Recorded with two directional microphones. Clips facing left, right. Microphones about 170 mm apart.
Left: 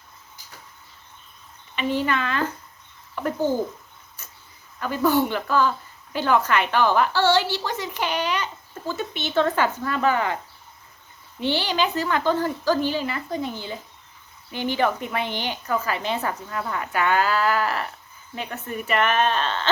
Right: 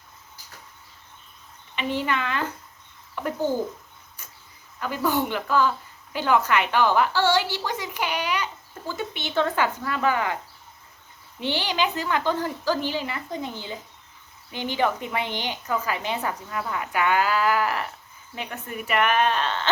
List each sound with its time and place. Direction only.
1.7 s a woman's voice: 15° right (ahead or behind)
4.8 s a woman's voice: 15° right (ahead or behind)
11.3 s a woman's voice: 15° right (ahead or behind)
14.7 s a woman's voice: 15° right (ahead or behind)